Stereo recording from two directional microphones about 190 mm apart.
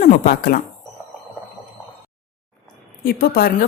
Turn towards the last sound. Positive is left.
turn(degrees=55)  # may be behind; listen again after turning